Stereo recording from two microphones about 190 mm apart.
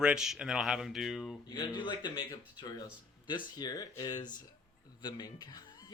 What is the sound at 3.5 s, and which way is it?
Speech, 20° left (ahead or behind).